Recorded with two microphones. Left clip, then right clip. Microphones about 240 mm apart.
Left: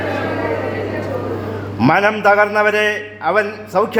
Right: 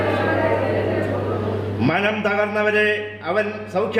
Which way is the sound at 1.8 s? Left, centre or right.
Left.